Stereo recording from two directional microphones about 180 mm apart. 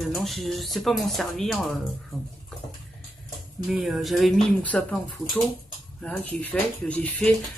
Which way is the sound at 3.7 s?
Centre (ahead or behind).